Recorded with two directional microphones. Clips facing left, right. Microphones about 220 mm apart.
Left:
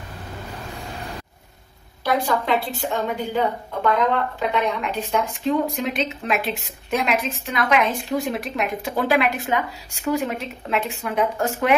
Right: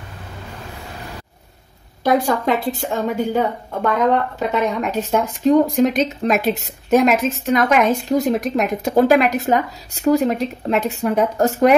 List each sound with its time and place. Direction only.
2.0 s a woman's voice: 45° right (ahead or behind)